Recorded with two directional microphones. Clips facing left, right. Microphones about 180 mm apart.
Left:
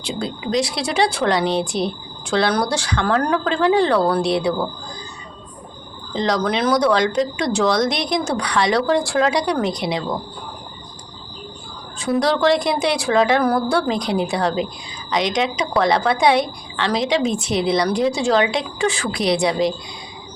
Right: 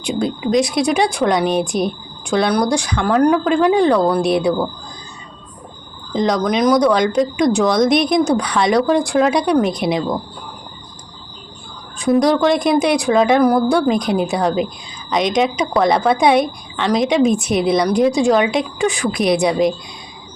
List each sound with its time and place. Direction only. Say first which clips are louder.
0.0 s speech: right 6 dB; 20° right (ahead or behind)
6.1 s speech: right 3 dB; 15° right (ahead or behind)
11.9 s speech: right 5 dB; 15° right (ahead or behind)